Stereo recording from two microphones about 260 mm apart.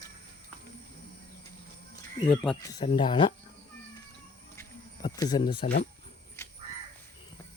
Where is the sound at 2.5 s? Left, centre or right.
Centre.